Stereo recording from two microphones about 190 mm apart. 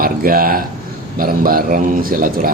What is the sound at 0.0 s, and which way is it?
Speech, 50° right (ahead or behind).